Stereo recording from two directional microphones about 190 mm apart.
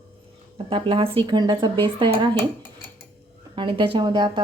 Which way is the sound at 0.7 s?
25° right (ahead or behind).